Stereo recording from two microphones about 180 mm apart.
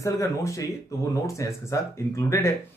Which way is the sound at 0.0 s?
15° left (ahead or behind).